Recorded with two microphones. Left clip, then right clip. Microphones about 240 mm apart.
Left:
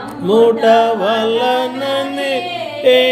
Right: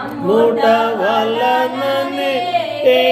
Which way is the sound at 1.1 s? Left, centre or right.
Left.